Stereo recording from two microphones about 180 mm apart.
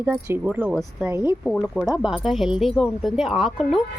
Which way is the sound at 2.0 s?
Centre (ahead or behind).